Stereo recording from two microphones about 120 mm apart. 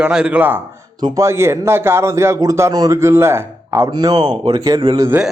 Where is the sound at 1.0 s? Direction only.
25° right (ahead or behind).